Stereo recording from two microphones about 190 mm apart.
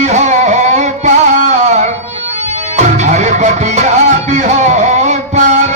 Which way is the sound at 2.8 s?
40° right (ahead or behind).